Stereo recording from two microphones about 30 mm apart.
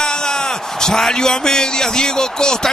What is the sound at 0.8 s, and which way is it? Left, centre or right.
A man's voice, centre.